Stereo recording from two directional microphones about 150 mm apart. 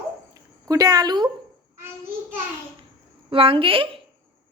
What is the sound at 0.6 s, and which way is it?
Speech, 25° right (ahead or behind).